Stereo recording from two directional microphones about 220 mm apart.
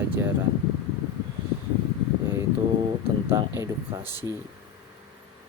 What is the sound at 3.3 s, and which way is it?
Speech, 15° right (ahead or behind).